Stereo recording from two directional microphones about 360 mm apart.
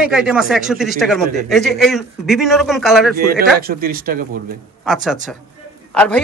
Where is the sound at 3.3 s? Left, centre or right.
Right.